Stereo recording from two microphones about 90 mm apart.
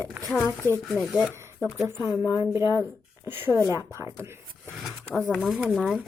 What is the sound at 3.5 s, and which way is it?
Speech, 40° left (ahead or behind).